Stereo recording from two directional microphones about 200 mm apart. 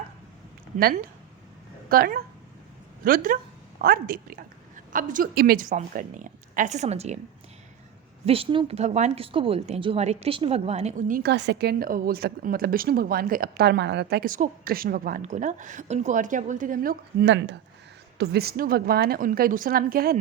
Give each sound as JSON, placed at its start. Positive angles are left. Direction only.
{"t": 1.9, "sound": "a woman's voice", "side_deg": -50}
{"t": 8.2, "sound": "a woman's voice", "side_deg": -30}
{"t": 11.3, "sound": "a woman's voice", "side_deg": -60}